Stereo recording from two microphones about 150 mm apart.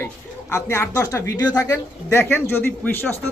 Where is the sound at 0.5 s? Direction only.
15° left (ahead or behind).